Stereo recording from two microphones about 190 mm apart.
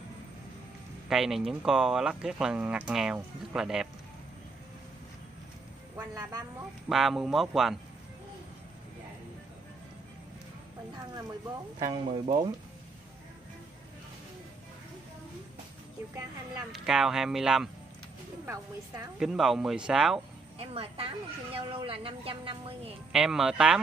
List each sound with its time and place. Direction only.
1.0 s speech: centre (ahead or behind)
5.9 s speech: 20° right (ahead or behind)
6.9 s speech: centre (ahead or behind)
11.8 s a woman's voice: 25° right (ahead or behind)
16.7 s speech: 5° right (ahead or behind)
19.1 s speech: centre (ahead or behind)
20.5 s a woman's voice: 30° right (ahead or behind)
23.1 s speech: centre (ahead or behind)